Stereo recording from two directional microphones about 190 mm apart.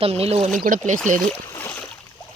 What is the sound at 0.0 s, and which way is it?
Speech, 30° right (ahead or behind).